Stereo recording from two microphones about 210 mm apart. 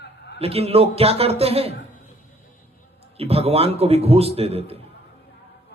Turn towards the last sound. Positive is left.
turn(degrees=-30)  # may be behind; listen again after turning